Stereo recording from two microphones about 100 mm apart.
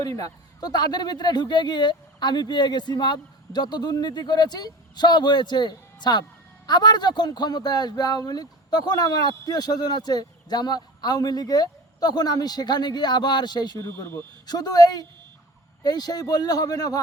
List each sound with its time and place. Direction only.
0.0 s a man's voice: 40° left (ahead or behind)
13.8 s speech: 25° left (ahead or behind)
14.4 s a man's voice: 40° left (ahead or behind)